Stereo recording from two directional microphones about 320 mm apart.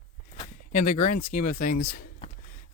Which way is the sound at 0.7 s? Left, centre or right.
Left.